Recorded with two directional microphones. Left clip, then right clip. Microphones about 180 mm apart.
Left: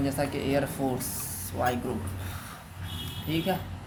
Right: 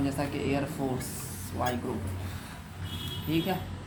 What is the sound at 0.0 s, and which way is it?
Speech, 30° left (ahead or behind).